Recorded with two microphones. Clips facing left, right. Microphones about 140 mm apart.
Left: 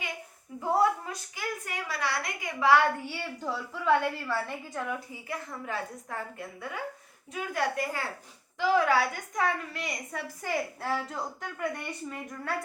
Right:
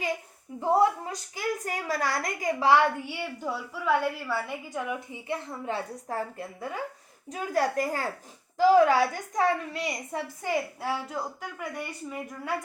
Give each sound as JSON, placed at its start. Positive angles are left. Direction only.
{"t": 0.6, "sound": "a woman's voice", "side_deg": -25}
{"t": 3.1, "sound": "a woman's voice", "side_deg": -15}